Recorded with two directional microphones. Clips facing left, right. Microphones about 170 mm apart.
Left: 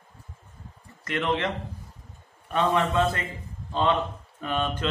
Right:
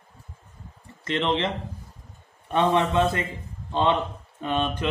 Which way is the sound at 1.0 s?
25° right (ahead or behind).